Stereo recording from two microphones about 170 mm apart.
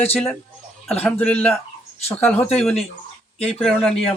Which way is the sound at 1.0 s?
5° left (ahead or behind).